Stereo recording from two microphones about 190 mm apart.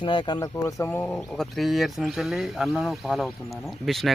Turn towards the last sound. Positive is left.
turn(degrees=0)  # may be behind; listen again after turning